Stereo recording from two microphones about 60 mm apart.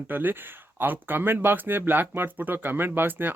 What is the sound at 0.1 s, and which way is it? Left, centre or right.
Speech, right.